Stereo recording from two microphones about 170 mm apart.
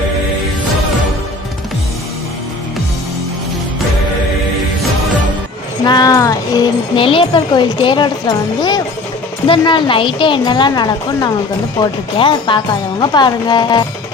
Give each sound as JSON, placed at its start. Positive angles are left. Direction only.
{"t": 5.8, "sound": "speech", "side_deg": 25}